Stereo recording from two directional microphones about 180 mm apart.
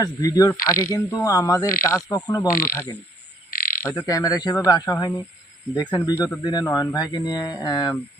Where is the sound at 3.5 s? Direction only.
50° left (ahead or behind).